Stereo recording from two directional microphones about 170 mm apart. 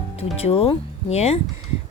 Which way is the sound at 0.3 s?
35° left (ahead or behind).